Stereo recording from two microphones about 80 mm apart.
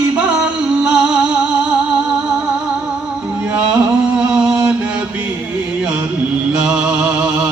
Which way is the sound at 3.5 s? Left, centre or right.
Centre.